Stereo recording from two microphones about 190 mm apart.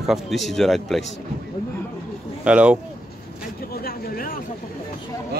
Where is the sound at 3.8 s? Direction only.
50° left (ahead or behind).